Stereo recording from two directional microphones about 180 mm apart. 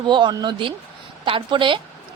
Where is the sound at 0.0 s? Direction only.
25° right (ahead or behind).